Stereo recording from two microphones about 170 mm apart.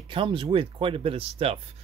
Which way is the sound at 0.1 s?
30° right (ahead or behind).